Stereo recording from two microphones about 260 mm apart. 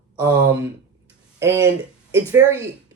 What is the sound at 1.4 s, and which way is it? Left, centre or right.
Speech, centre.